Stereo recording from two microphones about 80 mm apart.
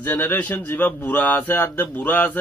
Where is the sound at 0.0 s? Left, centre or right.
Left.